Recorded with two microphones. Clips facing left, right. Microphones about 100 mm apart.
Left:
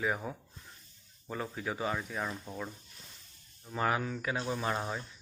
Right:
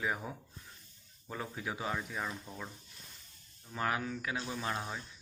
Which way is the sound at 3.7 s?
5° left (ahead or behind).